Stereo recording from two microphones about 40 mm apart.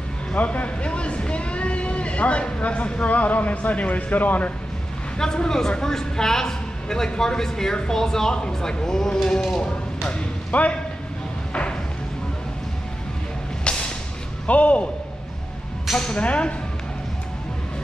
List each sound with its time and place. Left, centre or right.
0.3 s speech: left
5.2 s speech: centre
10.5 s speech: left
13.7 s music: left
14.4 s speech: left
16.2 s speech: left